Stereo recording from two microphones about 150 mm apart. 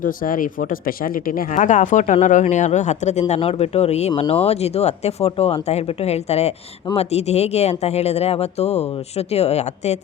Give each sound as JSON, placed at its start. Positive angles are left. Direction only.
{"t": 0.0, "sound": "speech", "side_deg": 65}